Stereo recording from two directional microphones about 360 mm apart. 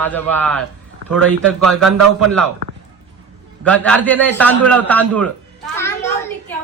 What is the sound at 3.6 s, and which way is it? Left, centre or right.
A man's voice, centre.